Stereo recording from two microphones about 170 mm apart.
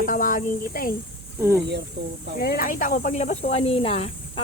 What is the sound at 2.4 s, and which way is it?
Speech, 60° left (ahead or behind).